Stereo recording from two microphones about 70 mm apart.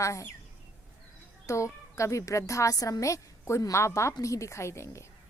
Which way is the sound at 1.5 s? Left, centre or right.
Left.